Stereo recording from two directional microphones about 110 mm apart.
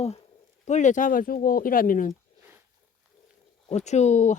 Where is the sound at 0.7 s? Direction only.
90° left.